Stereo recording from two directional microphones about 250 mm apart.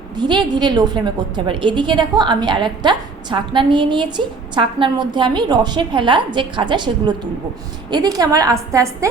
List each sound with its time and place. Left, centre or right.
0.2 s a woman's voice: centre